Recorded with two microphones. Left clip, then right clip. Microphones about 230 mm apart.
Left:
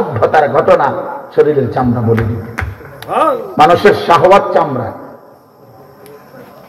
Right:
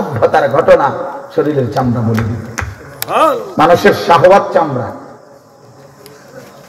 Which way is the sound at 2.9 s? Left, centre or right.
Right.